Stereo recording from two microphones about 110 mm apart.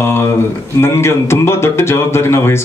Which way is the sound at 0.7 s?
25° left (ahead or behind).